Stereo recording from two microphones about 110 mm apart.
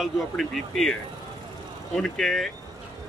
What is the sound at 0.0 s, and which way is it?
Speech, centre (ahead or behind).